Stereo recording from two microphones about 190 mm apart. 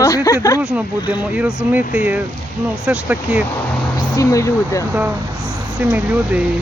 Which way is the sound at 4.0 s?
20° left (ahead or behind).